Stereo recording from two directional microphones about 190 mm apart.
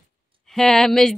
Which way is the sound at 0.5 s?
Centre (ahead or behind).